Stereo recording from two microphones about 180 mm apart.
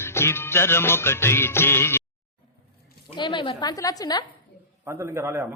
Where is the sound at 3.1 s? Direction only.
25° left (ahead or behind).